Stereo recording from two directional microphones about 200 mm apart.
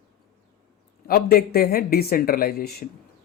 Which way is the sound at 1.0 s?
45° left (ahead or behind).